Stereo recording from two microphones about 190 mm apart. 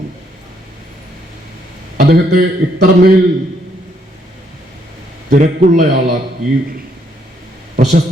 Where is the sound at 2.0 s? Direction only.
55° right (ahead or behind).